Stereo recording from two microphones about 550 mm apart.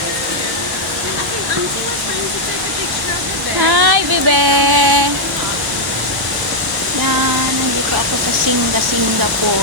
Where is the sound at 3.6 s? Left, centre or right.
Right.